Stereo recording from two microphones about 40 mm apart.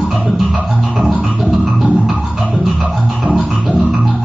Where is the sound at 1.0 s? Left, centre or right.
Right.